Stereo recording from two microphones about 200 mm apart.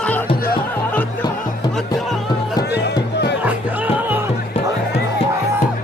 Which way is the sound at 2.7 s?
55° left (ahead or behind).